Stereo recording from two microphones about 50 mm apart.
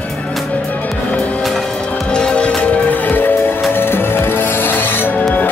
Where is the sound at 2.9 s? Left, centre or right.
Left.